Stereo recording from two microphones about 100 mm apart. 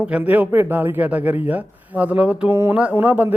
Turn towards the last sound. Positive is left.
turn(degrees=-20)  # may be behind; listen again after turning